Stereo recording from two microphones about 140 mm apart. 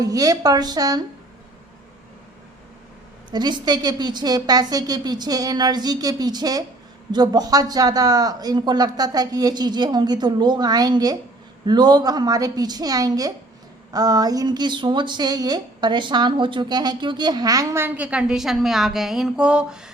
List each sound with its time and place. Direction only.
0.0 s a woman's voice: 25° right (ahead or behind)
3.3 s a woman's voice: 30° right (ahead or behind); by 19.9 s 5° right (ahead or behind)